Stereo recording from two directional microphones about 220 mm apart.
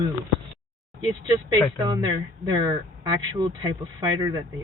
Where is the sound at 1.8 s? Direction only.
20° right (ahead or behind).